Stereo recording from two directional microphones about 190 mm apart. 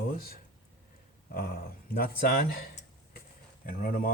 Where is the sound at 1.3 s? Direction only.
50° left (ahead or behind).